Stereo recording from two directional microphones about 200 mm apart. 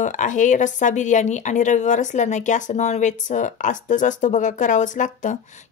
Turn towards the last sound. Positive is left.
turn(degrees=40)  # may be behind; listen again after turning